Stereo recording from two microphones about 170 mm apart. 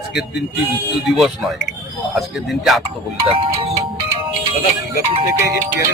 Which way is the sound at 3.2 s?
30° right (ahead or behind).